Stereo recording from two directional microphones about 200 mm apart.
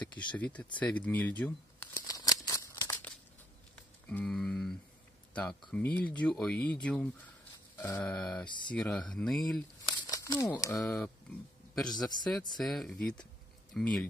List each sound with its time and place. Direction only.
0.0 s speech: 5° left (ahead or behind)
0.7 s a sound: 5° left (ahead or behind)
3.7 s speech: 5° left (ahead or behind)
7.7 s grunt: 10° left (ahead or behind)
8.5 s speech: 25° left (ahead or behind)
8.7 s speech: 5° left (ahead or behind)
9.8 s crumpling: 20° left (ahead or behind)
10.7 s speech: centre (ahead or behind)